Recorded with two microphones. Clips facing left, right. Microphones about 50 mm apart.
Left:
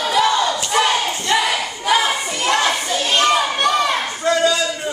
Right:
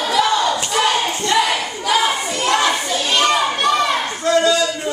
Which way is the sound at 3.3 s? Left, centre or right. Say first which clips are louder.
Right 1 dB; centre.